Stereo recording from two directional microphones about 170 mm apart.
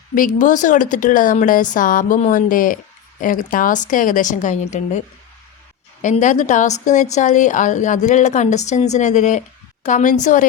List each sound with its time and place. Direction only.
0.1 s speech: 50° left (ahead or behind)
6.0 s speech: 45° left (ahead or behind)